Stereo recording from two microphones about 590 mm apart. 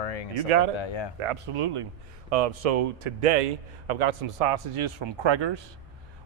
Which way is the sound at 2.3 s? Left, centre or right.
Right.